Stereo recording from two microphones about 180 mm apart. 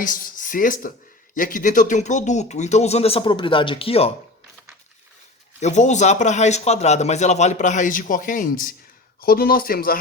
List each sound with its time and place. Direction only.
0.0 s a man's voice: 50° left (ahead or behind); by 4.1 s 35° left (ahead or behind)
5.5 s a man's voice: 40° left (ahead or behind)